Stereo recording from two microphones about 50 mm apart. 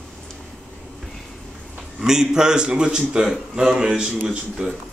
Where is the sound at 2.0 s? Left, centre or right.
Centre.